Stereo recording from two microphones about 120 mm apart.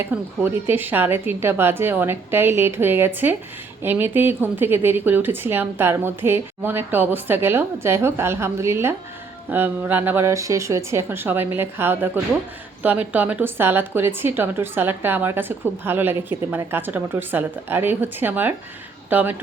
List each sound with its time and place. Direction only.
0.0 s a woman's voice: 15° right (ahead or behind)